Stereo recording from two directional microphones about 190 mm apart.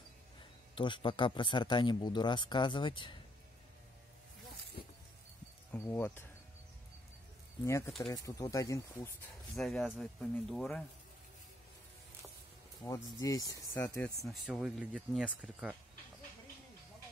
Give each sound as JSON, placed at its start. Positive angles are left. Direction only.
{"t": 0.7, "sound": "speech", "side_deg": 25}
{"t": 5.7, "sound": "speech", "side_deg": 10}
{"t": 7.6, "sound": "speech", "side_deg": 15}
{"t": 9.6, "sound": "speech", "side_deg": 0}
{"t": 12.8, "sound": "speech", "side_deg": 15}
{"t": 13.9, "sound": "speech", "side_deg": 0}